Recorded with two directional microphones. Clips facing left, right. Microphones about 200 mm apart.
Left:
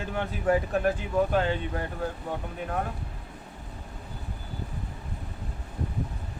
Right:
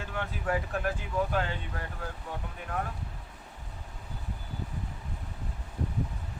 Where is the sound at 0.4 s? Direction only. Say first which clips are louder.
Left 7 dB; 25° left (ahead or behind).